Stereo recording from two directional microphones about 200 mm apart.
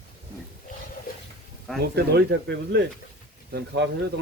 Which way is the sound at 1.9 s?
55° right (ahead or behind).